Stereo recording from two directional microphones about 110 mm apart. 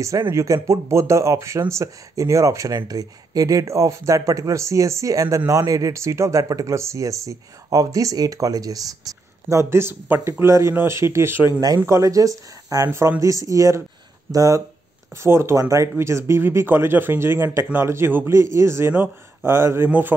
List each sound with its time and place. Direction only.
0.3 s speech: 25° right (ahead or behind)